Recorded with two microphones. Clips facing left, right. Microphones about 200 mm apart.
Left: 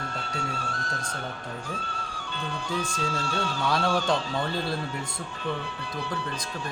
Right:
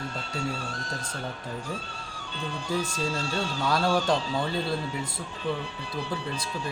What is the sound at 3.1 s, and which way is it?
Speech, 55° left (ahead or behind).